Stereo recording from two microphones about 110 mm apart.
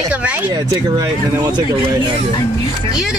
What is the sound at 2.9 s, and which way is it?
Speech, centre (ahead or behind).